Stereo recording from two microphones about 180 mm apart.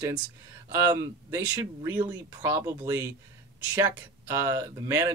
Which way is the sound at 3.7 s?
20° right (ahead or behind).